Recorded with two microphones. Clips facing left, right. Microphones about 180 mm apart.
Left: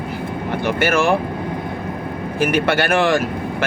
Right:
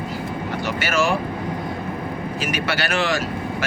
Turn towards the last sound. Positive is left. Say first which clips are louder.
# left 6 dB
turn(degrees=55)  # may be behind; listen again after turning